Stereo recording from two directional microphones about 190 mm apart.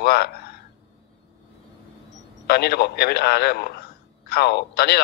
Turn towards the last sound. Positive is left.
turn(degrees=60)  # may be behind; listen again after turning